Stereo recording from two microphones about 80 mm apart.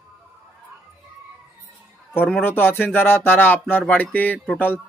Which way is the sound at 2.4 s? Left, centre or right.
Left.